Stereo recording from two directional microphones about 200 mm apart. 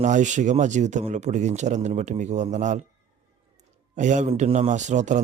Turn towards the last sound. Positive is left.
turn(degrees=-35)  # may be behind; listen again after turning